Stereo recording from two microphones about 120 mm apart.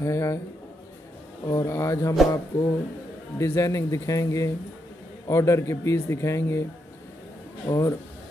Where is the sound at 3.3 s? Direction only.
25° left (ahead or behind).